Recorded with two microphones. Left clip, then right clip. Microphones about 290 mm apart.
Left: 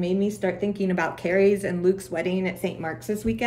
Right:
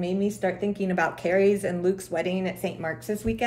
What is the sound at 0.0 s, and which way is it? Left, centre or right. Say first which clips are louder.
Speech: left 1 dB; centre.